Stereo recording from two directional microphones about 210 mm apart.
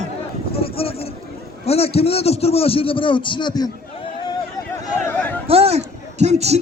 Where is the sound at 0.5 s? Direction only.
25° left (ahead or behind).